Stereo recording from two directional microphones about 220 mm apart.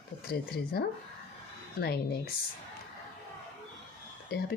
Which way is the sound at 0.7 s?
45° left (ahead or behind).